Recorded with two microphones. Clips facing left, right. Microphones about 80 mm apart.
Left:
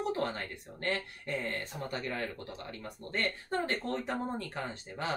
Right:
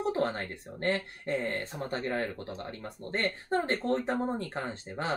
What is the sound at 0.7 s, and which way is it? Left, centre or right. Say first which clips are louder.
Speech: right 4 dB; right.